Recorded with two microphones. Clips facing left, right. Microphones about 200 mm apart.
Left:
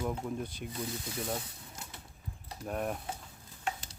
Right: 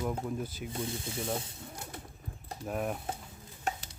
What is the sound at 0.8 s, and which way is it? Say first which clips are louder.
Sanding: right 1 dB; 25° right (ahead or behind).